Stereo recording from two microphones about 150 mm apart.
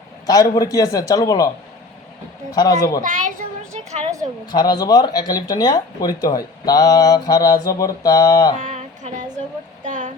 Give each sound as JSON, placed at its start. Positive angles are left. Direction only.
{"t": 0.3, "sound": "speech", "side_deg": 25}
{"t": 2.5, "sound": "speech", "side_deg": 25}
{"t": 3.0, "sound": "a child's voice", "side_deg": -60}
{"t": 4.5, "sound": "speech", "side_deg": 25}
{"t": 8.5, "sound": "a sound", "side_deg": -55}